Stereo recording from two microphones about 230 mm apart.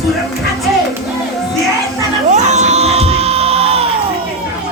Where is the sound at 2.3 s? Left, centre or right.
Right.